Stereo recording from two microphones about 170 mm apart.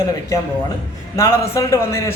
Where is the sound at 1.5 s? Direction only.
15° left (ahead or behind).